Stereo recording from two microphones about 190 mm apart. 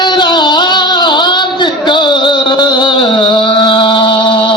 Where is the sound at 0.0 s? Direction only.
25° left (ahead or behind).